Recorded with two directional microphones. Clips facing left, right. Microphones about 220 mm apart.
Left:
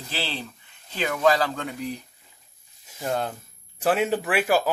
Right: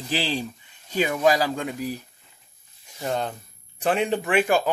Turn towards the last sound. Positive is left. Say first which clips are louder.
# right 1 dB
turn(degrees=5)  # may be behind; listen again after turning